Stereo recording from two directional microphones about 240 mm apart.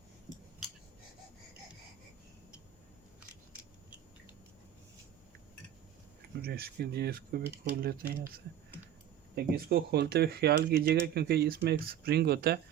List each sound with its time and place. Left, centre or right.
6.4 s speech: right
9.3 s speech: right